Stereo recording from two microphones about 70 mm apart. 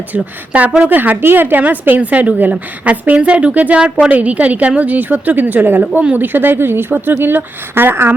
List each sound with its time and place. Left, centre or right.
0.1 s a woman's voice: right